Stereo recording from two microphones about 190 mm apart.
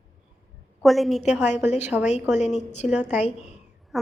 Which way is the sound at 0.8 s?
Centre (ahead or behind).